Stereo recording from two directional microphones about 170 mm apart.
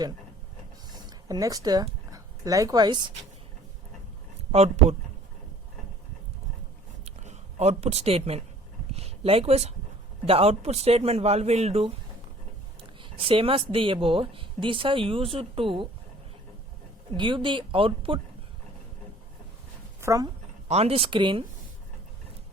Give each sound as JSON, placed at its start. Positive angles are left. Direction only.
{"t": 0.9, "sound": "a sound", "side_deg": -25}
{"t": 4.5, "sound": "a woman's voice", "side_deg": -40}
{"t": 7.0, "sound": "a sound", "side_deg": -40}
{"t": 8.9, "sound": "a woman's voice", "side_deg": -40}
{"t": 13.0, "sound": "a woman's voice", "side_deg": -30}
{"t": 17.2, "sound": "a woman's voice", "side_deg": -30}
{"t": 20.0, "sound": "speech", "side_deg": -20}
{"t": 20.7, "sound": "a woman's voice", "side_deg": -40}